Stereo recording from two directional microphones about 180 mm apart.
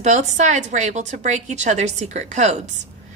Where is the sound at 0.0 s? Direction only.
40° right (ahead or behind).